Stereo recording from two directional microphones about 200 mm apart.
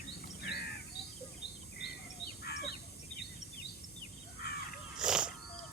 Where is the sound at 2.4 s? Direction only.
55° left (ahead or behind).